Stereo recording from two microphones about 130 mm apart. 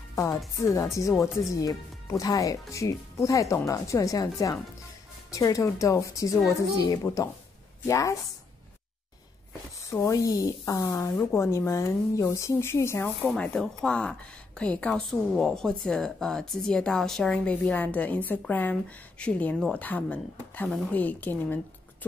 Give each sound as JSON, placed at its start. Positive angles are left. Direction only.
{"t": 0.1, "sound": "music", "side_deg": 25}
{"t": 0.6, "sound": "speech", "side_deg": 25}
{"t": 9.9, "sound": "speech", "side_deg": 25}
{"t": 13.2, "sound": "speech", "side_deg": 5}